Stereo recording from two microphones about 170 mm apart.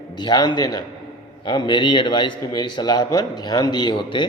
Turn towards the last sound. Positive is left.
turn(degrees=30)  # may be behind; listen again after turning